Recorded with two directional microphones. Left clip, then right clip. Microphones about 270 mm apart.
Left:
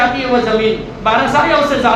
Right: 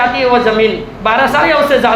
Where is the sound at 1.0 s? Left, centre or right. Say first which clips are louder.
Right 2 dB; right.